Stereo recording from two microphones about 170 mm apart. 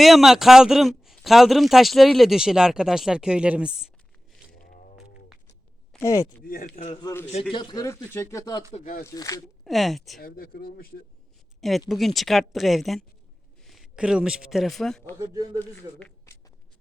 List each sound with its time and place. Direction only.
0.0 s a man's voice: centre (ahead or behind)
4.5 s a sound: 60° left (ahead or behind)
6.0 s speech: 20° left (ahead or behind)
6.4 s speech: 55° left (ahead or behind)
6.7 s a man's voice: 40° left (ahead or behind)
7.0 s a man's voice: 15° left (ahead or behind)
7.5 s a man's voice: 25° left (ahead or behind)
8.7 s speech: 50° left (ahead or behind)
9.0 s a man's voice: 20° left (ahead or behind)
9.6 s a man's voice: centre (ahead or behind)
10.2 s speech: 60° left (ahead or behind)
11.9 s a man's voice: centre (ahead or behind)